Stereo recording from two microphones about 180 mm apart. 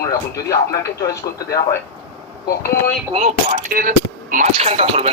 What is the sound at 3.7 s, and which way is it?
Speech, 50° right (ahead or behind).